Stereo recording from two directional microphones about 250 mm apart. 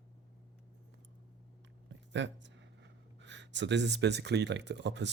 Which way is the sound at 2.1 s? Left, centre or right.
Right.